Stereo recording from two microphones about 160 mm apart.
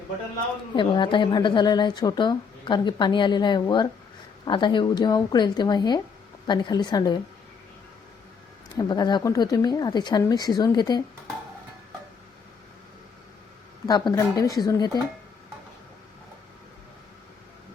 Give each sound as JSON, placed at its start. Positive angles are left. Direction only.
{"t": 0.8, "sound": "a woman's voice", "side_deg": 30}
{"t": 8.7, "sound": "a woman's voice", "side_deg": 25}
{"t": 13.8, "sound": "a woman's voice", "side_deg": 25}